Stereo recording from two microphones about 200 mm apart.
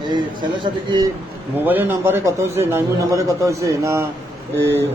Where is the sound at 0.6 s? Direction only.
20° right (ahead or behind).